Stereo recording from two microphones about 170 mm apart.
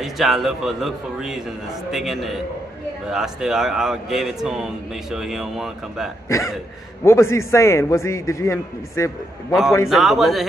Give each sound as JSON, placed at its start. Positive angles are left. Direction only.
{"t": 0.0, "sound": "a man's voice", "side_deg": 0}
{"t": 6.2, "sound": "a man's voice", "side_deg": 20}
{"t": 9.8, "sound": "a man's voice", "side_deg": 0}